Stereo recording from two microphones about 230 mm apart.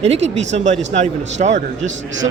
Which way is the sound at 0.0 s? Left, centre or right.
Right.